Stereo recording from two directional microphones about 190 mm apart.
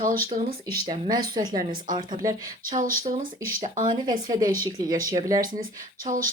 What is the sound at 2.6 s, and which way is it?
Speech, 45° right (ahead or behind).